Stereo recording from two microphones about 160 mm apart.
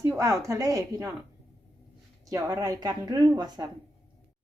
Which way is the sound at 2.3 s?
25° right (ahead or behind).